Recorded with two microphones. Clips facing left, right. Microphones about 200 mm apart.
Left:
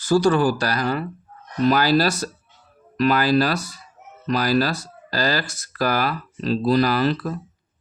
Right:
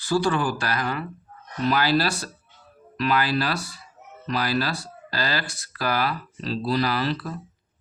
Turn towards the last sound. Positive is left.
turn(degrees=50)  # may be behind; listen again after turning